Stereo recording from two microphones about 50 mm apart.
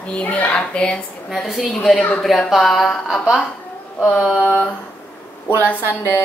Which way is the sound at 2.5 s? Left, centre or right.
Centre.